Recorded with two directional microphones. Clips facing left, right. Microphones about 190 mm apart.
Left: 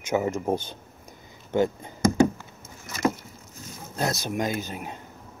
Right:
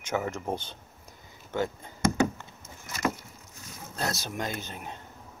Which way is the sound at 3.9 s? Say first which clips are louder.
Left 5 dB; 15° left (ahead or behind).